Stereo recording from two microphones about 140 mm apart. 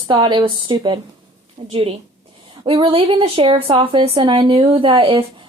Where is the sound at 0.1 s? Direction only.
35° right (ahead or behind).